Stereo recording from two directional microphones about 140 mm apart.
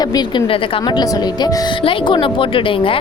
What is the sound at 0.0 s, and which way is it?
A woman's voice, 30° left (ahead or behind).